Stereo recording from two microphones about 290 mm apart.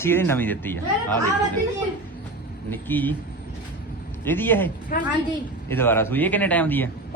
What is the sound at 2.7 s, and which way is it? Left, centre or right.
Speech, centre.